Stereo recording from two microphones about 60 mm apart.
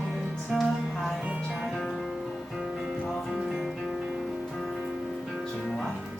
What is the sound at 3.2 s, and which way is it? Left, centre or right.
Music, centre.